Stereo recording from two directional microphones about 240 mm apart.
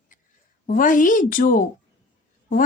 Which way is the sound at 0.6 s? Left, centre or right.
Left.